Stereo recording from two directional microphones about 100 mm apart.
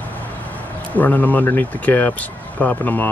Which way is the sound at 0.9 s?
15° left (ahead or behind).